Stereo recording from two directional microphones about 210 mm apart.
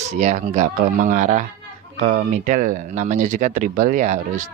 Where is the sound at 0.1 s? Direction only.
35° right (ahead or behind).